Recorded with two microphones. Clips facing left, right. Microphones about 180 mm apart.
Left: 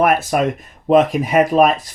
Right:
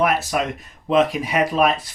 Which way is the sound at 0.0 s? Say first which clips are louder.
Left 5 dB; 50° left (ahead or behind).